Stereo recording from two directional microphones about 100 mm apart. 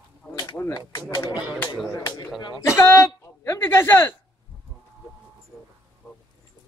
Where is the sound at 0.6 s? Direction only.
30° left (ahead or behind).